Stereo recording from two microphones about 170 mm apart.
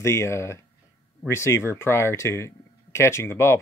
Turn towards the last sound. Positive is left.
turn(degrees=15)  # may be behind; listen again after turning